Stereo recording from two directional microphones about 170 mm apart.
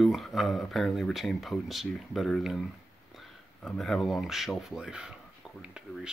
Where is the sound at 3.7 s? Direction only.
Centre (ahead or behind).